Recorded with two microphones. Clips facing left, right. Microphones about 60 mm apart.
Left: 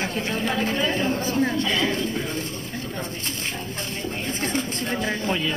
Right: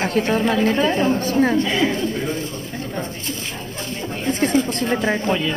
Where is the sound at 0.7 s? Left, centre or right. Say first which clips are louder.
Right 5 dB; centre.